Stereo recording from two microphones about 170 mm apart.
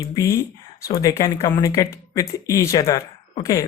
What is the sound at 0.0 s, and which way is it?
Speech, 20° left (ahead or behind).